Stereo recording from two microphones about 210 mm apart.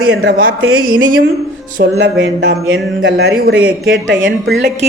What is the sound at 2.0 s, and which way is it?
A man's voice, 65° right (ahead or behind).